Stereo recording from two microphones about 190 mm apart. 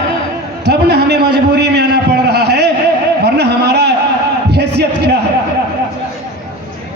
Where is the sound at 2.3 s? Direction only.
60° right (ahead or behind).